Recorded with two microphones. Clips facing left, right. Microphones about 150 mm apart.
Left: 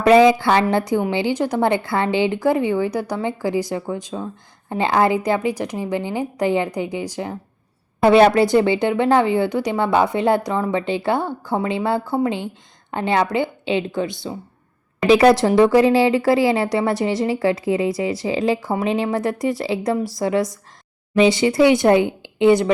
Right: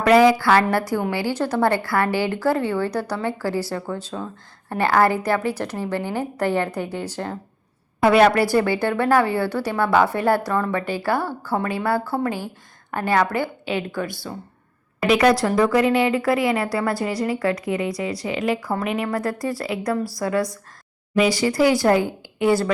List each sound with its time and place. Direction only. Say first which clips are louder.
0.0 s speech: left 2 dB; 20° left (ahead or behind)
8.0 s speech: left 3 dB; 25° left (ahead or behind)